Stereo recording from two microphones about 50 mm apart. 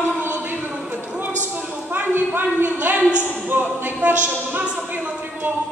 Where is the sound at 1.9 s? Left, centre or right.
Right.